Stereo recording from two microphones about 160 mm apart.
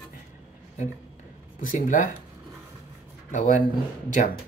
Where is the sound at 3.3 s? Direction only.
55° left (ahead or behind).